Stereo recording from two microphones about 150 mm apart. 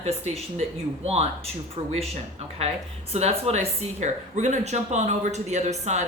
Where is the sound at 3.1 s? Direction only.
45° right (ahead or behind).